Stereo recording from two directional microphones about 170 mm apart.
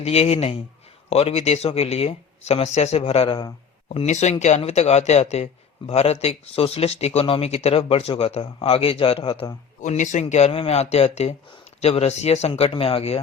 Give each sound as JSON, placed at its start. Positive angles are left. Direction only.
{"t": 0.0, "sound": "speech", "side_deg": 35}
{"t": 3.8, "sound": "speech", "side_deg": 40}
{"t": 9.8, "sound": "speech", "side_deg": 45}